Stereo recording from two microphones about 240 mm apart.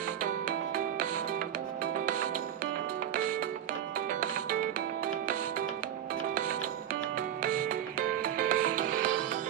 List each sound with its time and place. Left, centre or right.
0.2 s music: right
4.1 s music: right
6.3 s music: right